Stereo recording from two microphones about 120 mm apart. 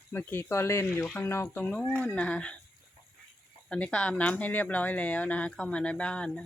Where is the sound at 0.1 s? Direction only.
20° left (ahead or behind).